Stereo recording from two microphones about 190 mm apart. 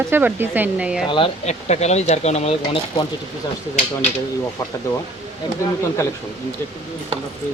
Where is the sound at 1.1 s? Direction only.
30° left (ahead or behind).